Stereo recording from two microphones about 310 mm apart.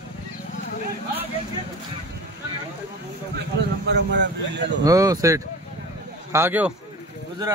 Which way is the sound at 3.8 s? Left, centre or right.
Right.